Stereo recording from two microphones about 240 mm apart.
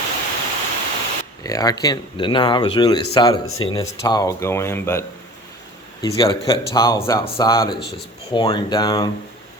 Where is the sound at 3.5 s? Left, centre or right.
Left.